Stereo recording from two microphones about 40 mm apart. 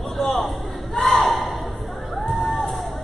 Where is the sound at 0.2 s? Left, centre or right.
Centre.